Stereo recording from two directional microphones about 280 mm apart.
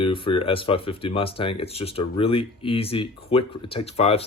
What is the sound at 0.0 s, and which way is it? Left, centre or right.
Speech, centre.